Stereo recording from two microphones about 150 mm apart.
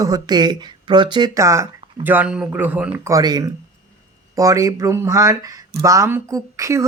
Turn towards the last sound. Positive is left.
turn(degrees=-20)  # may be behind; listen again after turning